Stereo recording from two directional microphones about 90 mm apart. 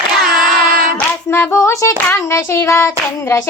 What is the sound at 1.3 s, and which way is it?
Child singing, 25° left (ahead or behind).